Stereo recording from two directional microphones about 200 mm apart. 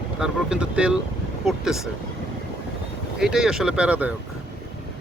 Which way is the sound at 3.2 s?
5° right (ahead or behind).